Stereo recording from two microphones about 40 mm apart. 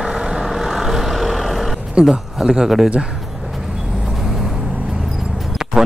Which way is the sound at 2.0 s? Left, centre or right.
Centre.